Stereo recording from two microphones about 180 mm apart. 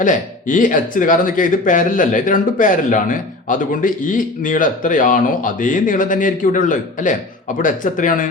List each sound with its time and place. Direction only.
0.0 s speech: 45° left (ahead or behind)